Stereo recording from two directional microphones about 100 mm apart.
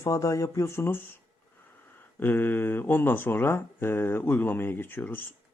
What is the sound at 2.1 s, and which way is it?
Speech, 20° left (ahead or behind).